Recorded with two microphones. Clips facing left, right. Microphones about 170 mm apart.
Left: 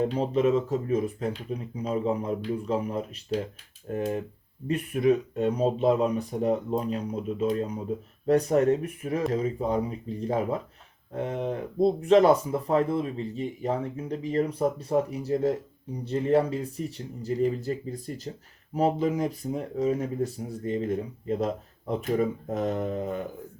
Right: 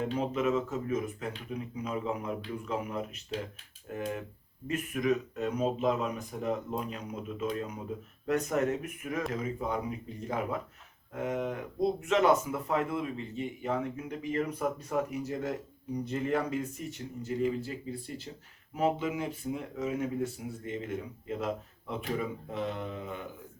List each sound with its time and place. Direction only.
0.0 s speech: 35° left (ahead or behind)